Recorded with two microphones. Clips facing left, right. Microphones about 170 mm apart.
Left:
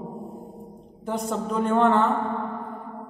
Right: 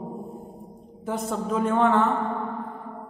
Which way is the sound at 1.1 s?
Centre (ahead or behind).